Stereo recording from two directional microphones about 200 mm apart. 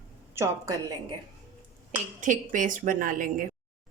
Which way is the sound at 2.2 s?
40° right (ahead or behind).